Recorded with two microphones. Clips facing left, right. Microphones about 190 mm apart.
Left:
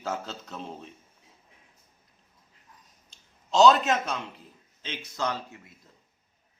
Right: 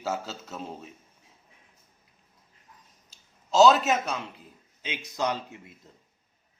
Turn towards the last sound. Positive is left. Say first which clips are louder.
# right 4 dB
turn(degrees=-25)  # may be behind; listen again after turning